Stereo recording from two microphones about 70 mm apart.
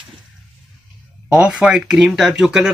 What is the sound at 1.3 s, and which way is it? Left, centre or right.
Speech, centre.